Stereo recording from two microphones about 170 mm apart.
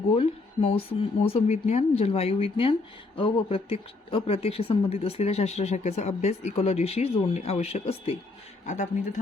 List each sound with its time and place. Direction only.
0.2 s a woman's voice: 35° left (ahead or behind)